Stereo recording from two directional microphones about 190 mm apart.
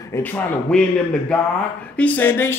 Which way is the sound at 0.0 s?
10° left (ahead or behind).